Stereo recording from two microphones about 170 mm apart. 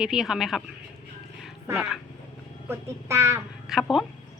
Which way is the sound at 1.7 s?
5° right (ahead or behind).